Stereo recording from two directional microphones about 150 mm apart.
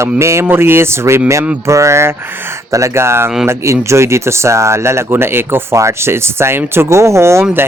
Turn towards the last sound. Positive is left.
turn(degrees=-20)  # may be behind; listen again after turning